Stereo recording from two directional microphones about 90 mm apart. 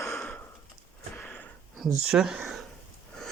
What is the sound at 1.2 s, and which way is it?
Sniff, 20° left (ahead or behind).